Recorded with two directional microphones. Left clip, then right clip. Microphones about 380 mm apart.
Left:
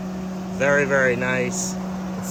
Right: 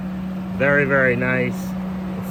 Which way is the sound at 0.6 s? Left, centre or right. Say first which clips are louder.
Right 2 dB; centre.